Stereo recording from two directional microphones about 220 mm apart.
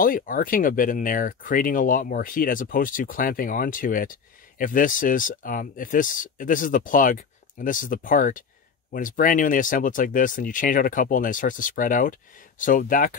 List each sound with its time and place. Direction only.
0.0 s speech: 40° left (ahead or behind)